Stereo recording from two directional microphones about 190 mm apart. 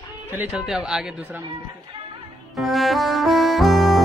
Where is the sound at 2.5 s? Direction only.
Centre (ahead or behind).